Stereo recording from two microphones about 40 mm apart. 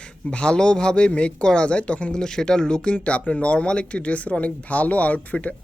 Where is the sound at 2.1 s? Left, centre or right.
Centre.